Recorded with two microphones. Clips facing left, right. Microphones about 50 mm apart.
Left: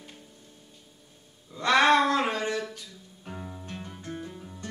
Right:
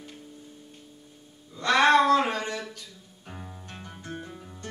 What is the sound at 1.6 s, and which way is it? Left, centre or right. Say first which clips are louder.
Music: right 1 dB; centre.